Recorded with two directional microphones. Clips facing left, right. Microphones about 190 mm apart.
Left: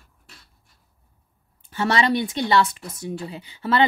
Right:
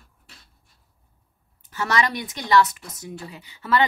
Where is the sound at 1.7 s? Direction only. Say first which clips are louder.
Left 3 dB; 30° left (ahead or behind).